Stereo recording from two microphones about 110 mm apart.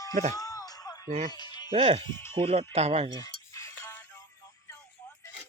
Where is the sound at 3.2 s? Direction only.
30° left (ahead or behind).